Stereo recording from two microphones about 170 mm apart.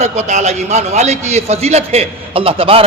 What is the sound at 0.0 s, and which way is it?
A man's voice, 45° right (ahead or behind).